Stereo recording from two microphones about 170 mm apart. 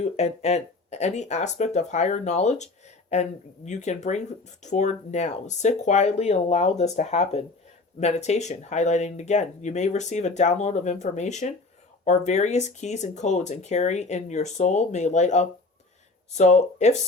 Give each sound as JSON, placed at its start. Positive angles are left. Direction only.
{"t": 0.0, "sound": "speech", "side_deg": 40}
{"t": 3.7, "sound": "speech", "side_deg": 45}